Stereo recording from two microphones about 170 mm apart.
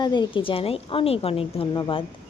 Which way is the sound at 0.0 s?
25° left (ahead or behind).